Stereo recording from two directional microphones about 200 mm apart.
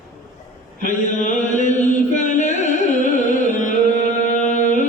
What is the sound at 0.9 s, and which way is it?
Chant, 40° left (ahead or behind).